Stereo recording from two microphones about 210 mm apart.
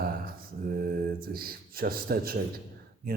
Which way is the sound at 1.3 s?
45° right (ahead or behind).